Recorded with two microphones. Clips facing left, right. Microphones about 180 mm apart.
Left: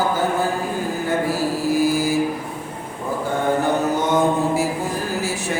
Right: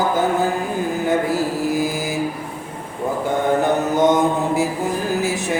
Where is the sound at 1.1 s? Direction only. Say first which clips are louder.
Right 1 dB; 20° right (ahead or behind).